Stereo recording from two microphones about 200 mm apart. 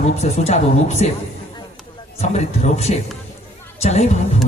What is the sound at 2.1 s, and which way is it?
A man's voice, 35° left (ahead or behind).